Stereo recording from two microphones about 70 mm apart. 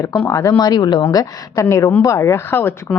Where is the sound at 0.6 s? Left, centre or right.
Left.